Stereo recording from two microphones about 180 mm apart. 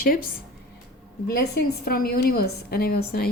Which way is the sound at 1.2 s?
65° left (ahead or behind).